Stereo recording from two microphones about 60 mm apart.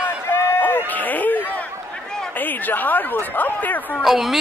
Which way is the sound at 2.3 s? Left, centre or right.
Left.